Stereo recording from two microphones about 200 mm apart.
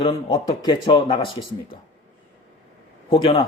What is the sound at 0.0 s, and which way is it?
A man's voice, 25° left (ahead or behind).